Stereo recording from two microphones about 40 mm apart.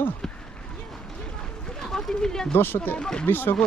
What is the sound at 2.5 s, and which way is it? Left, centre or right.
Speech, left.